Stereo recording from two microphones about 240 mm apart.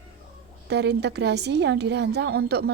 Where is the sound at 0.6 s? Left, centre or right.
Right.